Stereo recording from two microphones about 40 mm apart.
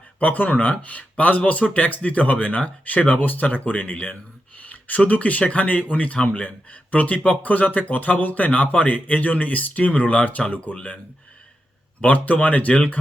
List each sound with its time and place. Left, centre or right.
0.2 s speech: left
3.2 s speech: left
3.4 s speech: left
10.8 s speech: left
11.9 s speech: left